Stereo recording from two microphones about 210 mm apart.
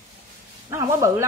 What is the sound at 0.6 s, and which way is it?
Speech, 15° right (ahead or behind).